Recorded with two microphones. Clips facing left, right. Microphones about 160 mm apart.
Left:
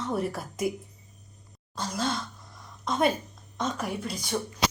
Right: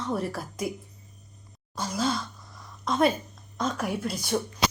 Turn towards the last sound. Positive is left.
turn(degrees=-5)  # may be behind; listen again after turning